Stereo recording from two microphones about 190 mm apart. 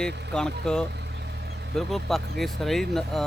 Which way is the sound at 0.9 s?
60° right (ahead or behind).